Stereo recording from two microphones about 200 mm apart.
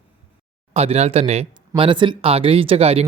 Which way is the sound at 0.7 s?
30° right (ahead or behind).